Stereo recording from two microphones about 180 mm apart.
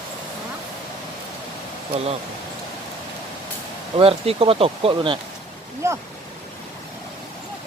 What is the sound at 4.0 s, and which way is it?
Speech, 30° right (ahead or behind).